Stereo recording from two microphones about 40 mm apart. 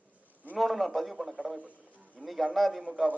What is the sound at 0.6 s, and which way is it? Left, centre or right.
A man's voice, centre.